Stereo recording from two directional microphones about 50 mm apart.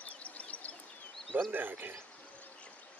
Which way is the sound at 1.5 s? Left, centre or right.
Right.